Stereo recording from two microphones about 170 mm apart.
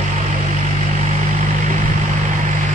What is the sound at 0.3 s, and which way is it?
Vehicle, 45° right (ahead or behind).